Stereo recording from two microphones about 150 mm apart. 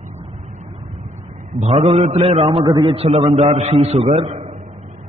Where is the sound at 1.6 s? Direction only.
45° right (ahead or behind).